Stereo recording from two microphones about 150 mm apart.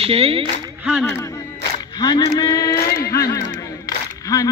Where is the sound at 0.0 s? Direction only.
40° right (ahead or behind).